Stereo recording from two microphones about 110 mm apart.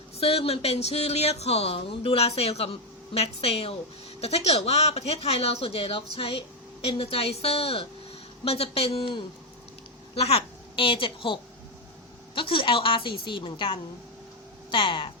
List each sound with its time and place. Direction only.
0.2 s a woman's voice: 65° left (ahead or behind)
10.2 s a woman's voice: 70° left (ahead or behind); by 15.1 s 55° left (ahead or behind)